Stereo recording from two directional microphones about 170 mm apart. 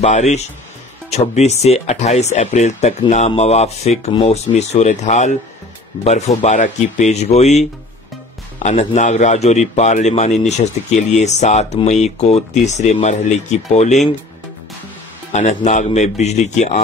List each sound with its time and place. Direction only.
0.0 s a man's voice: 40° left (ahead or behind)
8.6 s speech: 45° left (ahead or behind)
15.3 s a man's voice: 40° left (ahead or behind)